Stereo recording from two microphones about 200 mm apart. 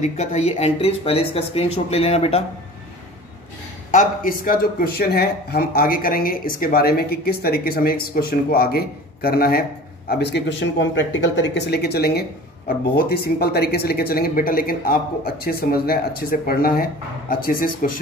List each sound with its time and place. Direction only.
0.0 s speech: 35° left (ahead or behind)
3.9 s speech: 40° left (ahead or behind)